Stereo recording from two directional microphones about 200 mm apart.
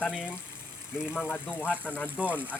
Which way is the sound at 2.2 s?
10° right (ahead or behind).